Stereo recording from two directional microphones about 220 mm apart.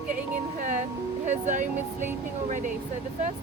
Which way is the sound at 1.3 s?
35° right (ahead or behind).